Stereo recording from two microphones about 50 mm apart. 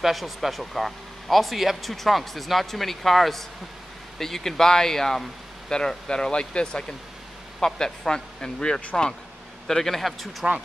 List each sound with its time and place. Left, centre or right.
0.0 s speech: centre
10.4 s speech: centre